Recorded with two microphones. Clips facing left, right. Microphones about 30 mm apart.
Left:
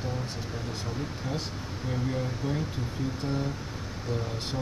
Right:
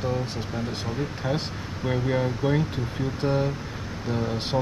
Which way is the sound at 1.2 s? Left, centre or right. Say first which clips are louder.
Right 6 dB; right.